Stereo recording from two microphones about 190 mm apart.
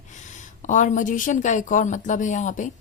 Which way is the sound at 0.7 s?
40° left (ahead or behind).